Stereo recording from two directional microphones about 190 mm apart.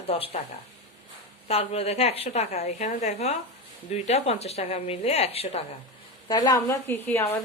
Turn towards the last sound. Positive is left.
turn(degrees=15)  # may be behind; listen again after turning